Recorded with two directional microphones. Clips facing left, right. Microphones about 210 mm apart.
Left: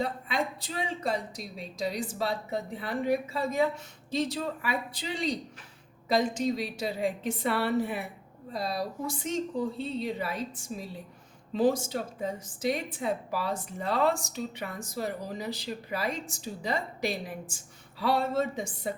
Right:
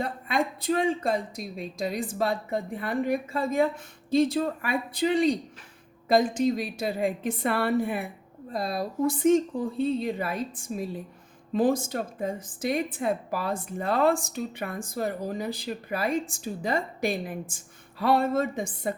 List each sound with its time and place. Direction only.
0.0 s a woman's voice: 50° right (ahead or behind)